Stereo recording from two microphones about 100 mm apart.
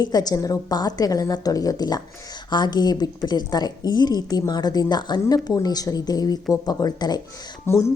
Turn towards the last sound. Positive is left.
turn(degrees=25)  # may be behind; listen again after turning